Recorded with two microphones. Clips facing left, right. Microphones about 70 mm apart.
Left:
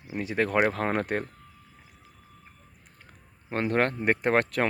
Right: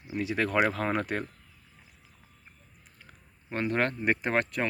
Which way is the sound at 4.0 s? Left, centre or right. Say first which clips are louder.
Left 3 dB; left.